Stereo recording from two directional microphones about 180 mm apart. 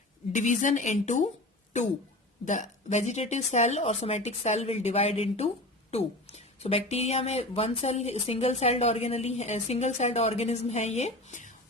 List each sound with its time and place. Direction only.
0.3 s a woman's voice: 45° left (ahead or behind)
2.4 s a woman's voice: 40° left (ahead or behind)